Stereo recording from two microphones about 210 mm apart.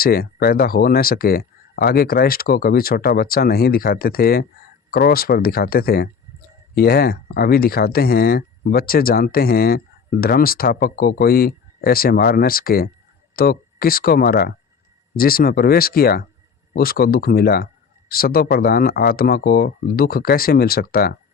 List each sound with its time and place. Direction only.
0.0 s speech: 45° left (ahead or behind)